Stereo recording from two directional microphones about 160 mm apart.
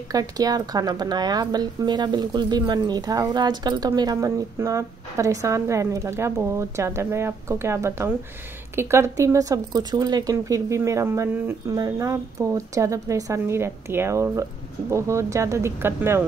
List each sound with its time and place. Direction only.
0.1 s a woman's voice: 25° right (ahead or behind)